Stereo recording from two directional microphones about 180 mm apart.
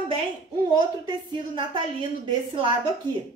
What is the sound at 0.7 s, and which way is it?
A woman's voice, 25° right (ahead or behind).